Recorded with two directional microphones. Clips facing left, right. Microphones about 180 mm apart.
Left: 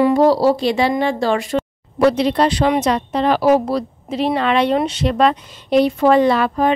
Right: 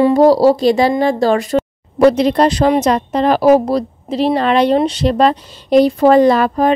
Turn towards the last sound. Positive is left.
turn(degrees=-40)  # may be behind; listen again after turning